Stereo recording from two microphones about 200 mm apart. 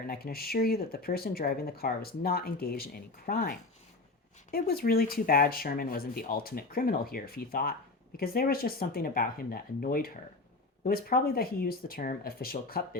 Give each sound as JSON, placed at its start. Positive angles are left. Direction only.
{"t": 0.1, "sound": "speech", "side_deg": 50}
{"t": 4.5, "sound": "speech", "side_deg": 50}